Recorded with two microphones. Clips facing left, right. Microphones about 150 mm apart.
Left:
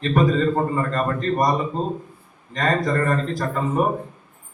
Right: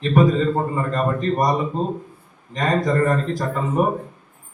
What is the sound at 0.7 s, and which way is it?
Speech, 15° right (ahead or behind).